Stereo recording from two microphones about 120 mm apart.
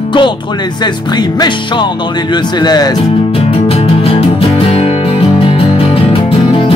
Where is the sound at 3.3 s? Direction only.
55° left (ahead or behind).